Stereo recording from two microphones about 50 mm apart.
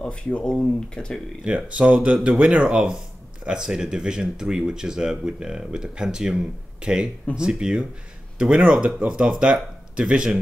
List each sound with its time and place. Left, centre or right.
0.0 s speech: left
1.4 s speech: right